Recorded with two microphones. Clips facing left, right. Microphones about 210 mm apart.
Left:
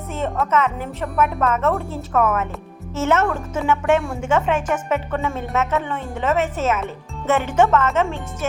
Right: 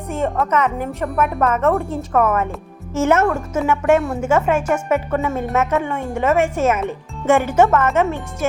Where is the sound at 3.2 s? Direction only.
Centre (ahead or behind).